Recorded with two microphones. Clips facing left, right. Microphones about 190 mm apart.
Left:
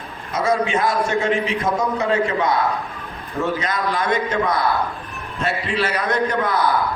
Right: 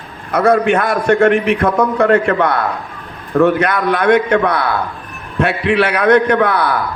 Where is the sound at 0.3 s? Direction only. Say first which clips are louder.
Right 8 dB; 60° right (ahead or behind).